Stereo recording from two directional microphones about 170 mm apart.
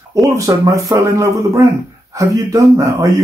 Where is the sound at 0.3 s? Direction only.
20° right (ahead or behind).